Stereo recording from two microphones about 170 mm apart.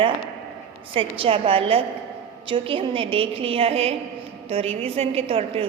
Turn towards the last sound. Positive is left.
turn(degrees=-35)  # may be behind; listen again after turning